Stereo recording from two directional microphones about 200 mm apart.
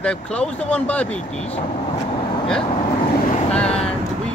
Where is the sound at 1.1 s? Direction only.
30° left (ahead or behind).